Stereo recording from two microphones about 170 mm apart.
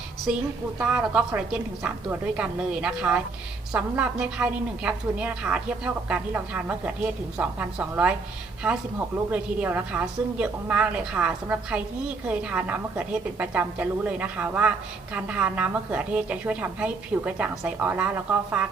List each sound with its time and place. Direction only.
0.3 s a woman's voice: 5° right (ahead or behind)